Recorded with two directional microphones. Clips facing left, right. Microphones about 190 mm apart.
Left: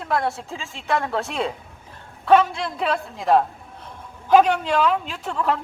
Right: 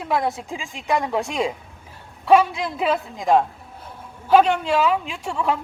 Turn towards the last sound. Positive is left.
turn(degrees=-5)  # may be behind; listen again after turning